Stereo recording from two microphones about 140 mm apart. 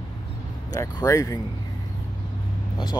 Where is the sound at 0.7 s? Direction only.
25° left (ahead or behind).